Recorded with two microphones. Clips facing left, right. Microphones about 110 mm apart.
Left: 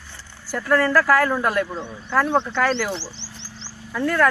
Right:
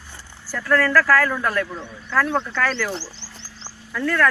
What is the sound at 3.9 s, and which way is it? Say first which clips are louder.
Speech: left 1 dB; 15° left (ahead or behind).